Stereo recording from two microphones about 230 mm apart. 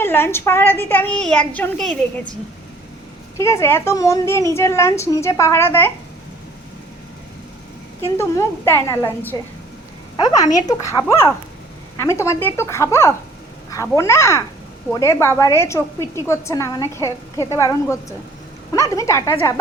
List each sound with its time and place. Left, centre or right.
0.0 s a woman's voice: centre
3.3 s a woman's voice: centre
8.0 s a woman's voice: centre